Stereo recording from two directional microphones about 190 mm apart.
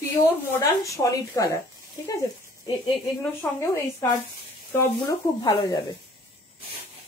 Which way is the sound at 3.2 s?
15° left (ahead or behind).